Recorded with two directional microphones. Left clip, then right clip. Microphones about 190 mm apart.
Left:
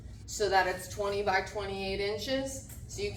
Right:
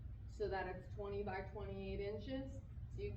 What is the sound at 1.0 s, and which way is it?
A woman's voice, 10° left (ahead or behind).